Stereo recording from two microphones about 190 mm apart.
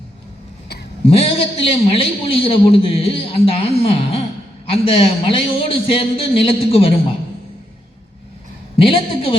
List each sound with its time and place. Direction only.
1.0 s a man's voice: 30° left (ahead or behind)
8.8 s a man's voice: 30° left (ahead or behind)